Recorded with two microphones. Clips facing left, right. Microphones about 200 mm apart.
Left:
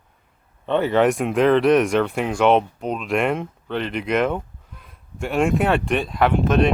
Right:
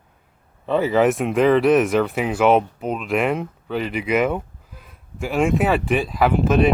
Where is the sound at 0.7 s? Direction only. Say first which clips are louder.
Even; centre (ahead or behind).